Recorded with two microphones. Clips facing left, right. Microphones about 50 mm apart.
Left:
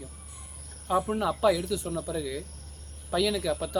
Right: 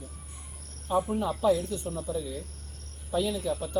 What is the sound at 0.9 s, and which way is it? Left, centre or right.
Speech, left.